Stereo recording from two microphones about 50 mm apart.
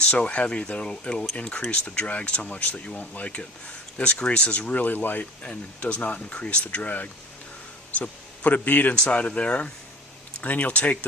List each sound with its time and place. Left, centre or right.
0.1 s speech: left
5.2 s a man's voice: left